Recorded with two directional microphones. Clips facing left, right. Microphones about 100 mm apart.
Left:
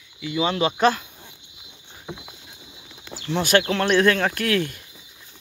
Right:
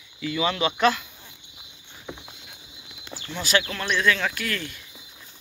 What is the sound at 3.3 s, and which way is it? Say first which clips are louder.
Speech: left 6 dB; 50° left (ahead or behind).